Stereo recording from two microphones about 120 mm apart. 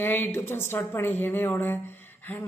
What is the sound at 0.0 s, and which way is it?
A woman's voice, 20° left (ahead or behind).